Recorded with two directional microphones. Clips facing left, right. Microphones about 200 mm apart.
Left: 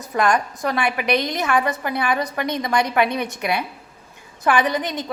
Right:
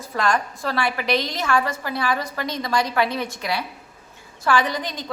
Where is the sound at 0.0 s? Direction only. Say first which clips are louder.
Left 3 dB; 15° left (ahead or behind).